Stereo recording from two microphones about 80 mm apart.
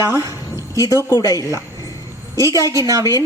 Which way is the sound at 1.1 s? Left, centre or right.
Left.